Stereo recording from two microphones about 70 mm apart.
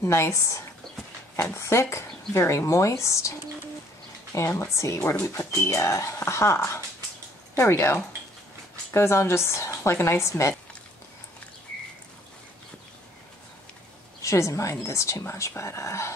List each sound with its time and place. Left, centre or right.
0.0 s a woman's voice: left
4.6 s a woman's voice: left
14.2 s a woman's voice: left